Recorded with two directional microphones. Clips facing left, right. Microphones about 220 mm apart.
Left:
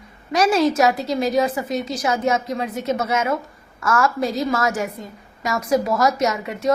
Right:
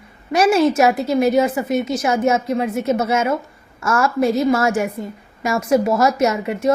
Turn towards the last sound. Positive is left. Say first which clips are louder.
# right 3 dB
turn(degrees=-25)  # may be behind; listen again after turning